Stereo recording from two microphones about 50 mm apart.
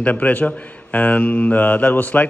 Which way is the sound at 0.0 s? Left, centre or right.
Left.